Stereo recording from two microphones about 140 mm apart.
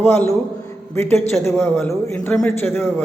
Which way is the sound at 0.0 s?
15° left (ahead or behind).